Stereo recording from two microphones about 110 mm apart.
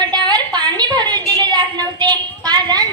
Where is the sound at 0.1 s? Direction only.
40° right (ahead or behind).